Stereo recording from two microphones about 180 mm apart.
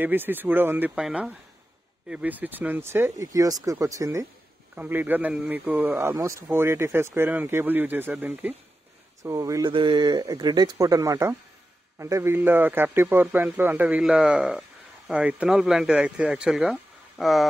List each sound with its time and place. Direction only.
0.0 s speech: 10° right (ahead or behind)